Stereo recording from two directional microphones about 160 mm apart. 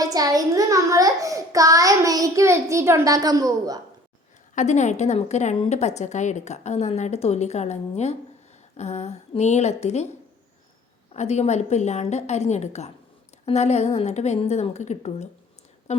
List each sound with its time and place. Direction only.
0.0 s a child's voice: 25° right (ahead or behind)
4.5 s a woman's voice: 50° left (ahead or behind)
11.1 s a woman's voice: 45° left (ahead or behind)